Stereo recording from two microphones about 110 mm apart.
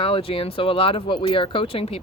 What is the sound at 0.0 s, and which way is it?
Speech, 60° left (ahead or behind).